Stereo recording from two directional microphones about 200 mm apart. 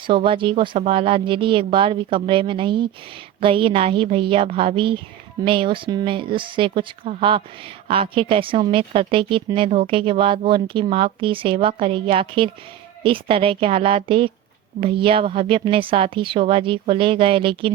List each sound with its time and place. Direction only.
0.1 s a woman's voice: 25° right (ahead or behind)